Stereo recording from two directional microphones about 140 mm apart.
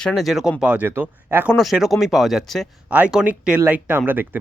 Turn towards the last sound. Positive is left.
turn(degrees=-15)  # may be behind; listen again after turning